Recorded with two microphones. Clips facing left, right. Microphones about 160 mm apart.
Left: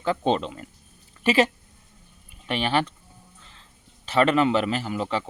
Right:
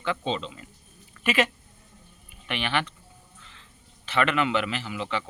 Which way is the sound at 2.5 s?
35° left (ahead or behind).